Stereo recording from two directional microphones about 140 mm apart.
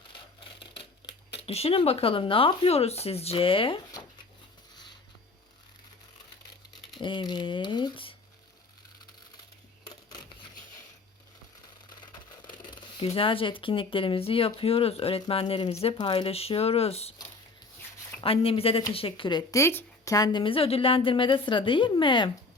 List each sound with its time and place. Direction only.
0.6 s speech: 40° left (ahead or behind)
7.0 s a woman's voice: 35° left (ahead or behind)
9.8 s scissors: 30° left (ahead or behind)
12.5 s a woman's voice: 35° left (ahead or behind)
18.2 s a woman's voice: 40° left (ahead or behind)